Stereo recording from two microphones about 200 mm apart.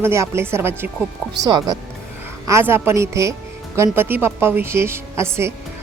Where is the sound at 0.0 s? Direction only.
15° right (ahead or behind).